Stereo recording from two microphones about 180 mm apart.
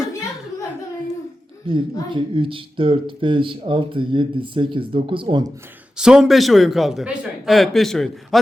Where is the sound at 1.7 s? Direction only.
30° right (ahead or behind).